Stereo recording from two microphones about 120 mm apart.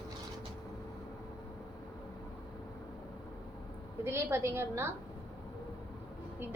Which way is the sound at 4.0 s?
20° right (ahead or behind).